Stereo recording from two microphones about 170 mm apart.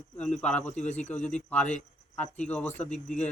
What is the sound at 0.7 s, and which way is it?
Speech, 45° left (ahead or behind).